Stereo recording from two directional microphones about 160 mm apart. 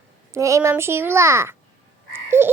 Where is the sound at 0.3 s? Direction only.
20° right (ahead or behind).